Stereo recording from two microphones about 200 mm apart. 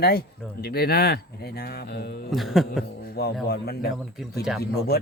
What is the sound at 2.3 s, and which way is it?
Speech, centre (ahead or behind).